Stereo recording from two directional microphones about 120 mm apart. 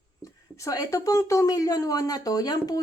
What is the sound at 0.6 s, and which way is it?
Speech, 30° left (ahead or behind).